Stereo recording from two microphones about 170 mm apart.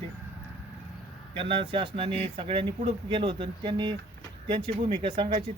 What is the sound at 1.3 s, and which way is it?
Speech, 30° right (ahead or behind).